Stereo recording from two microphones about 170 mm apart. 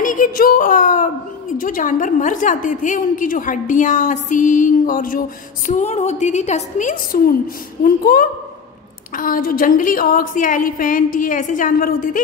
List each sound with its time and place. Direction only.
0.0 s a woman's voice: 50° left (ahead or behind)
5.7 s a woman's voice: 45° left (ahead or behind)